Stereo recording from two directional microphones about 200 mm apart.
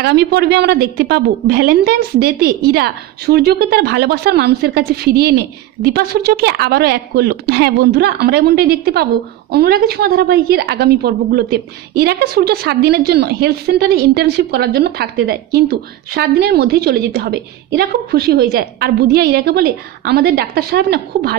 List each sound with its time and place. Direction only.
0.0 s a woman's voice: 55° right (ahead or behind)